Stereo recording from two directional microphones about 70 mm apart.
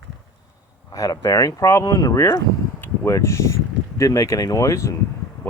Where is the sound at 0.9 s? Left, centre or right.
Left.